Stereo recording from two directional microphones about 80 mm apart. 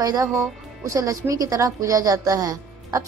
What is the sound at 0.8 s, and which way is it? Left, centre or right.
A woman's voice, right.